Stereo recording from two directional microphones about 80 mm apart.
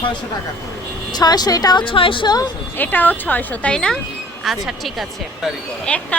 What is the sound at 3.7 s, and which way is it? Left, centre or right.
Speech, centre.